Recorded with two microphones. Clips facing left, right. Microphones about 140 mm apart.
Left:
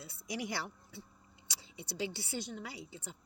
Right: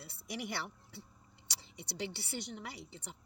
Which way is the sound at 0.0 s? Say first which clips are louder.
Left 2 dB; 60° right (ahead or behind).